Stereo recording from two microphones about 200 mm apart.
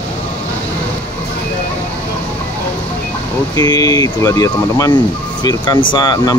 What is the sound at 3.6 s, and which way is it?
Speech, 20° left (ahead or behind).